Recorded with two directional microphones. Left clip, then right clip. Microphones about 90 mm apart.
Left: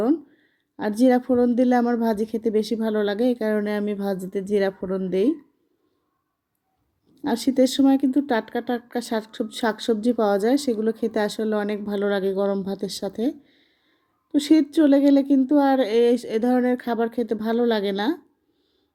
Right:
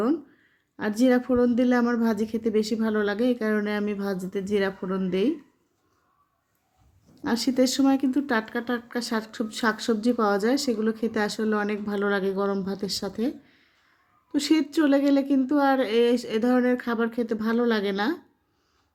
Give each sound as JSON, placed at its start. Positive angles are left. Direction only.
{"t": 0.8, "sound": "speech", "side_deg": 40}
{"t": 4.8, "sound": "speech", "side_deg": 25}
{"t": 7.2, "sound": "speech", "side_deg": 35}